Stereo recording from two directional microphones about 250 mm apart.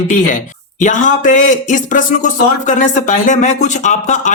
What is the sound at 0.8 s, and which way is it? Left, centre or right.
A man's voice, left.